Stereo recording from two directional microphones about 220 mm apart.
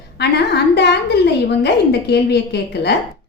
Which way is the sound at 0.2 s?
50° left (ahead or behind).